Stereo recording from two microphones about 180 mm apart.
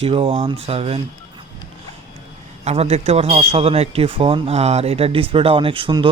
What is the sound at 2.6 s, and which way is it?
Speech, 35° right (ahead or behind).